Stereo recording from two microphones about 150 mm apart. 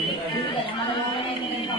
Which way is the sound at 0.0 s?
35° left (ahead or behind).